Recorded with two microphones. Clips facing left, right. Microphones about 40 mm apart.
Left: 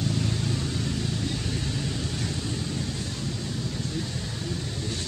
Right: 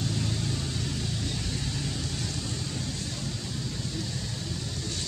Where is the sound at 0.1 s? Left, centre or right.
Centre.